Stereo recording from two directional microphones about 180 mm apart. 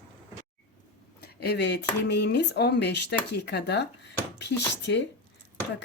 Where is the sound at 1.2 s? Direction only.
65° left (ahead or behind).